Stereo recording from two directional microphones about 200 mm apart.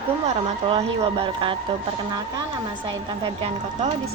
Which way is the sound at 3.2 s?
30° right (ahead or behind).